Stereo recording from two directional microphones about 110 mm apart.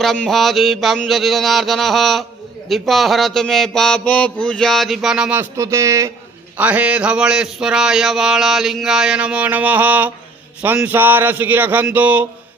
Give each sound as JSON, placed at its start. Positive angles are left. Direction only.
{"t": 0.0, "sound": "mantra", "side_deg": 0}
{"t": 5.4, "sound": "speech", "side_deg": -30}
{"t": 6.6, "sound": "a sound", "side_deg": -15}